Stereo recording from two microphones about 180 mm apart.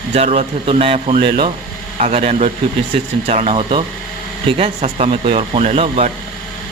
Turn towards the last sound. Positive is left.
turn(degrees=-35)  # may be behind; listen again after turning